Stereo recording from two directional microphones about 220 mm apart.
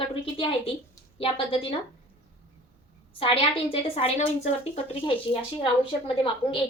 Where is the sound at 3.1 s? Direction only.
25° left (ahead or behind).